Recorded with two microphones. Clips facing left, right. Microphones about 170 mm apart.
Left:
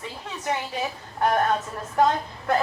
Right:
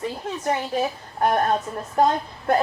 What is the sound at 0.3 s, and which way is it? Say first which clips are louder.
Speech: right 3 dB; 45° right (ahead or behind).